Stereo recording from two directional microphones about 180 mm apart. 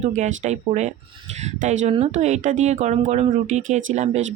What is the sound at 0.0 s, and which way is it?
Speech, 40° right (ahead or behind).